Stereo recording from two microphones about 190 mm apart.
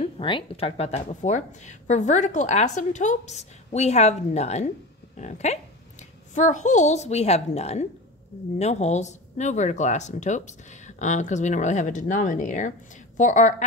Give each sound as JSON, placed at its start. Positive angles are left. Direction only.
{"t": 0.0, "sound": "a child's voice", "side_deg": 25}